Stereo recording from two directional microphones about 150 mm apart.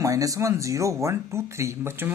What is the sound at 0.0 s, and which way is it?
Speech, 20° right (ahead or behind).